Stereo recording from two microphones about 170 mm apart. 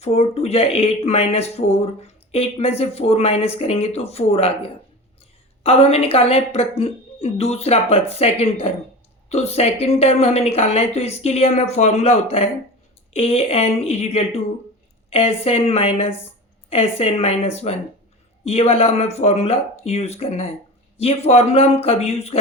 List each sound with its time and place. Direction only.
0.0 s speech: 40° left (ahead or behind)